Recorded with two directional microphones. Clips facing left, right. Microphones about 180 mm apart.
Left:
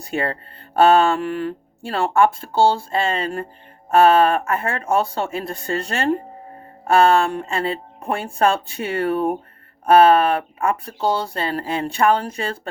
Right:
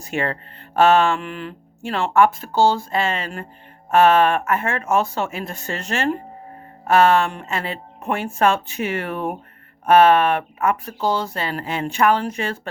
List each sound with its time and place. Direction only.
0.0 s speech: 35° left (ahead or behind)